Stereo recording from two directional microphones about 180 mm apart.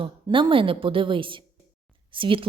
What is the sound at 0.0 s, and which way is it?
A woman's voice, 25° right (ahead or behind).